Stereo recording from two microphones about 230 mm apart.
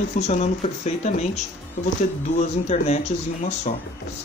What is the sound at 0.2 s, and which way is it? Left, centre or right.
Speech, left.